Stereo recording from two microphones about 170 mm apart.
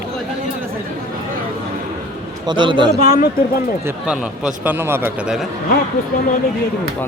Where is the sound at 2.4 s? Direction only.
25° right (ahead or behind).